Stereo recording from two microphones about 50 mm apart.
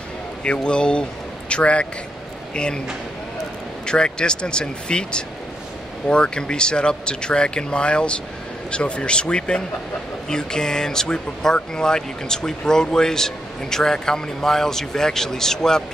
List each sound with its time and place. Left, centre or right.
0.4 s speech: centre
3.8 s speech: centre